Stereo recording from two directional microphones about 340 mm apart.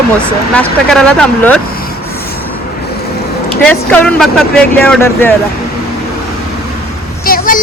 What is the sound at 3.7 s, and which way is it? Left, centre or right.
Speech, centre.